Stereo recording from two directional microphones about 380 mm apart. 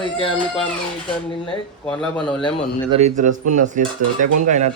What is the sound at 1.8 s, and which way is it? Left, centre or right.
Speech, centre.